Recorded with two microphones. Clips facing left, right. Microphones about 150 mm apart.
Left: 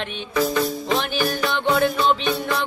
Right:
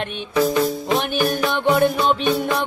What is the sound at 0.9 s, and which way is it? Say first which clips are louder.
Music: right 1 dB; 5° right (ahead or behind).